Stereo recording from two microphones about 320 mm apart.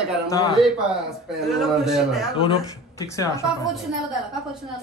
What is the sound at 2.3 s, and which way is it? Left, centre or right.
Speech, centre.